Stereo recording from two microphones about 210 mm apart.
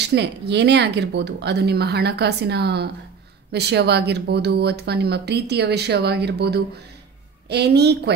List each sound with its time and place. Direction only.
0.0 s speech: 55° right (ahead or behind)